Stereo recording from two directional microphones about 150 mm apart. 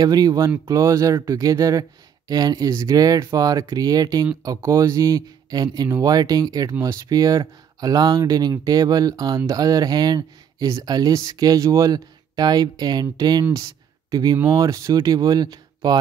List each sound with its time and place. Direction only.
0.0 s speech: 25° right (ahead or behind)